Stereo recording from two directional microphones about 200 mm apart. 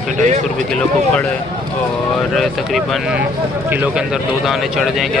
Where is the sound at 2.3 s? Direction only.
Centre (ahead or behind).